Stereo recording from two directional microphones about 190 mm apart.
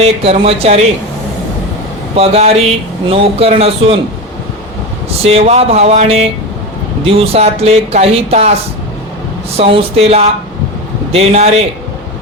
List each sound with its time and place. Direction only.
0.0 s speech: 30° right (ahead or behind)
2.1 s speech: 30° right (ahead or behind)
5.2 s speech: 30° right (ahead or behind)
9.6 s speech: 30° right (ahead or behind)